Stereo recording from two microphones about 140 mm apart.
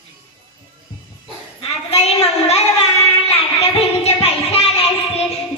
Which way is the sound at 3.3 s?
45° left (ahead or behind).